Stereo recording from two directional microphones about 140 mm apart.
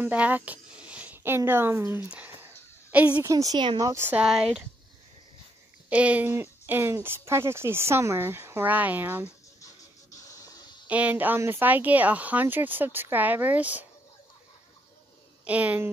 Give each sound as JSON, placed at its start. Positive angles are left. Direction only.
{"t": 0.0, "sound": "speech", "side_deg": -10}
{"t": 2.4, "sound": "a sound", "side_deg": -10}
{"t": 3.3, "sound": "speech", "side_deg": -25}
{"t": 5.9, "sound": "speech", "side_deg": -10}
{"t": 10.3, "sound": "a sound", "side_deg": 25}
{"t": 10.9, "sound": "speech", "side_deg": -10}
{"t": 15.4, "sound": "speech", "side_deg": -10}